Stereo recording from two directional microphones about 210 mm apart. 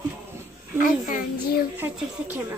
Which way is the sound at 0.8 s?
40° left (ahead or behind).